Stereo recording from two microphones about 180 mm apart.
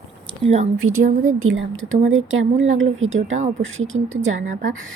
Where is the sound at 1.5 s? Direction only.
90° right.